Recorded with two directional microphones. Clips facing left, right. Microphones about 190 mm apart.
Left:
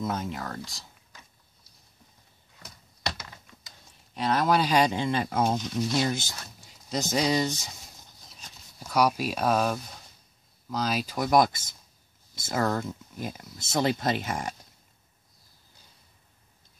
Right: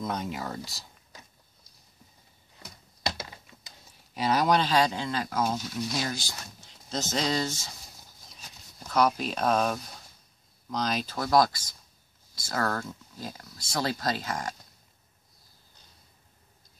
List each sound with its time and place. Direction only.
0.0 s speech: 5° left (ahead or behind)
4.1 s speech: centre (ahead or behind); by 7.7 s 15° left (ahead or behind)
8.7 s speech: 10° left (ahead or behind)
11.1 s speech: 20° left (ahead or behind)